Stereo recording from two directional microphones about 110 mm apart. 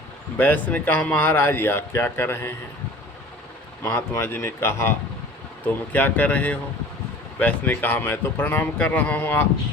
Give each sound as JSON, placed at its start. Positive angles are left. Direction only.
{"t": 0.3, "sound": "speech", "side_deg": 15}
{"t": 3.8, "sound": "speech", "side_deg": 20}